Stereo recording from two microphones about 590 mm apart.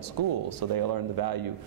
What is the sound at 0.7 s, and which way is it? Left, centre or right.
Speech, right.